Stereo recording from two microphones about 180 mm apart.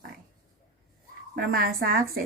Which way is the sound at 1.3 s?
55° right (ahead or behind).